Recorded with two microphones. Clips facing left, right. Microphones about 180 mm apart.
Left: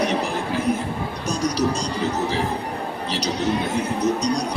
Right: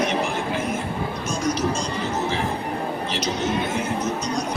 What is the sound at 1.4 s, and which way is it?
Speech, 35° left (ahead or behind).